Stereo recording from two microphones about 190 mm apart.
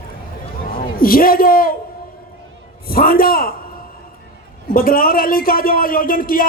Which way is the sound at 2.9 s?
50° left (ahead or behind).